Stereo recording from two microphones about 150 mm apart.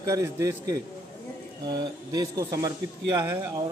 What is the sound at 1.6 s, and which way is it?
Speech, 25° right (ahead or behind).